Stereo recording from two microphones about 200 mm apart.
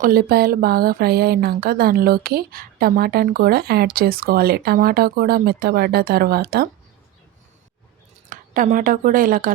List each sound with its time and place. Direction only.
0.0 s speech: 45° right (ahead or behind)
8.3 s a woman's voice: 40° right (ahead or behind)